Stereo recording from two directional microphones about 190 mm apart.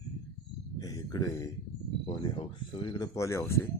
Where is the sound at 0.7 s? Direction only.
20° left (ahead or behind).